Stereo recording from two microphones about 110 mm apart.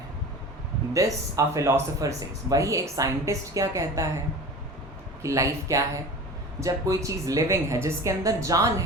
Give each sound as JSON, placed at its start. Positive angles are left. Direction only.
{"t": 0.9, "sound": "speech", "side_deg": -30}
{"t": 5.2, "sound": "speech", "side_deg": -30}